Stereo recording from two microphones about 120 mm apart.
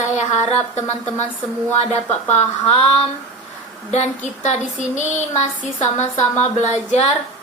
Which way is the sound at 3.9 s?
70° left (ahead or behind).